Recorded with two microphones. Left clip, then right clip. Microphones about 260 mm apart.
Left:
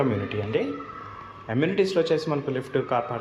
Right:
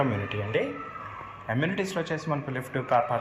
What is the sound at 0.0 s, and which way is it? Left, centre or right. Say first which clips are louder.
A man's voice: left 2 dB; centre.